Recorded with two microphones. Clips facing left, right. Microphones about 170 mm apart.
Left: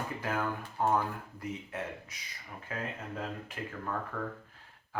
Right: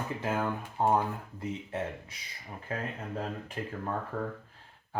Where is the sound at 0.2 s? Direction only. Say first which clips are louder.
Right 3 dB; 25° right (ahead or behind).